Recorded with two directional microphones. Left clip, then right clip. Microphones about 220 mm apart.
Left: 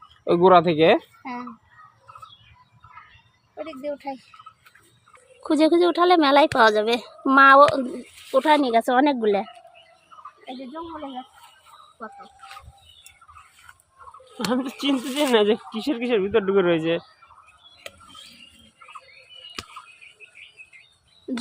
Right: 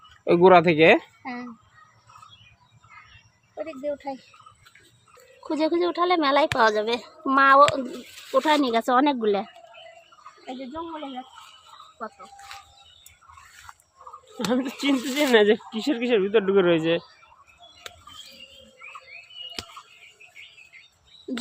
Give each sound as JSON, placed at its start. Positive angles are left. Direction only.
{"t": 0.3, "sound": "speech", "side_deg": -5}
{"t": 3.5, "sound": "speech", "side_deg": 0}
{"t": 5.4, "sound": "speech", "side_deg": 25}
{"t": 8.3, "sound": "speech", "side_deg": 10}
{"t": 14.3, "sound": "speech", "side_deg": 5}